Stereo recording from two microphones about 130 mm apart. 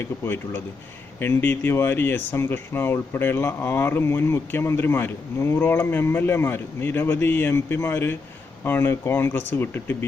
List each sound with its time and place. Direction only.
0.0 s speech: 20° left (ahead or behind)